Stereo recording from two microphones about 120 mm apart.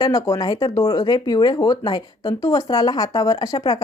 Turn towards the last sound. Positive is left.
turn(degrees=30)  # may be behind; listen again after turning